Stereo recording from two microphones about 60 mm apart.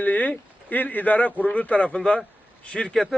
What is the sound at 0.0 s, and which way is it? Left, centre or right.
Speech, left.